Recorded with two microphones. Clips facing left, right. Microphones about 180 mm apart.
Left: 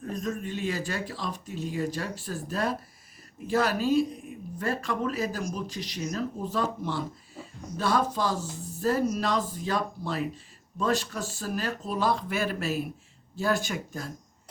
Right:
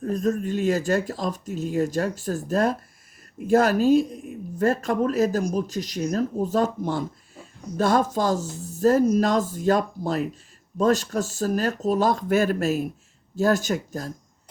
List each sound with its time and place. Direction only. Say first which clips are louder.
0.0 s speech: right 8 dB; 40° right (ahead or behind)